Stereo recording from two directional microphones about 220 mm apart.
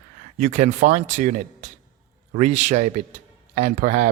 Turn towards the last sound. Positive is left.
turn(degrees=-35)  # may be behind; listen again after turning